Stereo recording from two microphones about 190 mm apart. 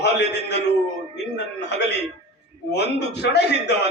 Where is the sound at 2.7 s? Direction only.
65° left (ahead or behind).